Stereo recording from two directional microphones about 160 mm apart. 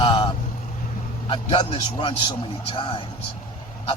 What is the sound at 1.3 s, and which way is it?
A man's voice, 35° left (ahead or behind).